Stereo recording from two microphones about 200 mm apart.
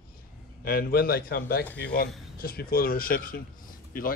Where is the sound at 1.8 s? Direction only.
60° left (ahead or behind).